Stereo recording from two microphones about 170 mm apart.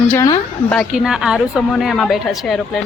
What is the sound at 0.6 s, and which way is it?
A woman's voice, centre (ahead or behind).